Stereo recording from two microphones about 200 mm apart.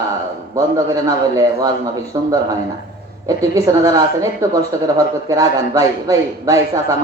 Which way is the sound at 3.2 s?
15° right (ahead or behind).